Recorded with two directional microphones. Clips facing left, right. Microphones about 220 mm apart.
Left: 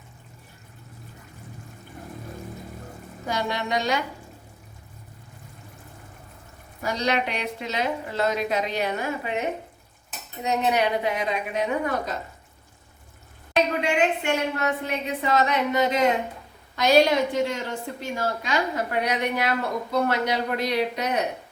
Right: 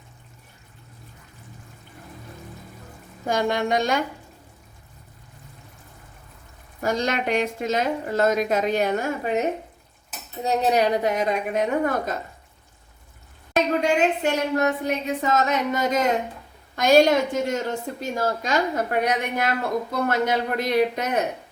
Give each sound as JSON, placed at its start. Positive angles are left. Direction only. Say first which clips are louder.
{"t": 3.2, "sound": "a woman's voice", "louder": "right 5 dB", "side_deg": -50}
{"t": 6.8, "sound": "a woman's voice", "louder": "right 2 dB", "side_deg": -50}
{"t": 10.4, "sound": "a woman's voice", "louder": "right 3 dB", "side_deg": -35}
{"t": 13.8, "sound": "a woman's voice", "louder": "right 2 dB", "side_deg": -40}